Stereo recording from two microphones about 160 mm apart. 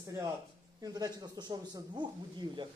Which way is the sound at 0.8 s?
25° right (ahead or behind).